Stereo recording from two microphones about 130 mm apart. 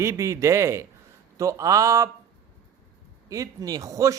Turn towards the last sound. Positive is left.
turn(degrees=-25)  # may be behind; listen again after turning